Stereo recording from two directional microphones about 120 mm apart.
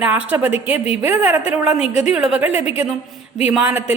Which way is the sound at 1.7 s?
60° left (ahead or behind).